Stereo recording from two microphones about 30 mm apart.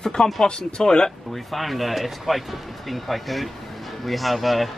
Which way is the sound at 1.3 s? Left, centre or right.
Centre.